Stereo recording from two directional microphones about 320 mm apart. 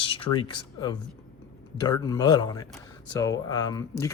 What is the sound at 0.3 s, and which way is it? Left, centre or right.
Speech, centre.